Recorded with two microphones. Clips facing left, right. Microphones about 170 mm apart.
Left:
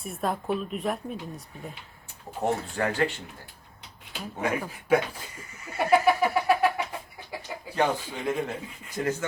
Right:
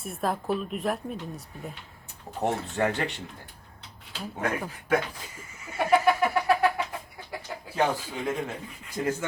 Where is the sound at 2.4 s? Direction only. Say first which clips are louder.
Right 1 dB; 20° right (ahead or behind).